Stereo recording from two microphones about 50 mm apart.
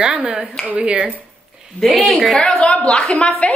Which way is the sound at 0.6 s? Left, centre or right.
Right.